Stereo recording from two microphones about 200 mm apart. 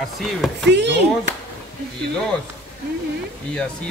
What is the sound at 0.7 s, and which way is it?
Speech, 60° right (ahead or behind).